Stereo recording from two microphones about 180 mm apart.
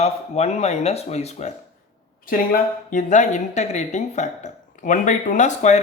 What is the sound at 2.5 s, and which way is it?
Speech, 45° left (ahead or behind).